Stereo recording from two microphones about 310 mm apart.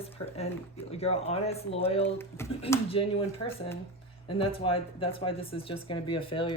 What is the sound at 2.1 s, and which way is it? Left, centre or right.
Speech, centre.